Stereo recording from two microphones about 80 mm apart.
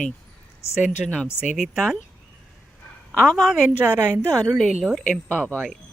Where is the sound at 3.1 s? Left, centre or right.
Centre.